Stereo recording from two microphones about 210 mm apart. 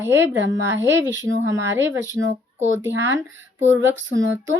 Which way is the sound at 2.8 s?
10° right (ahead or behind).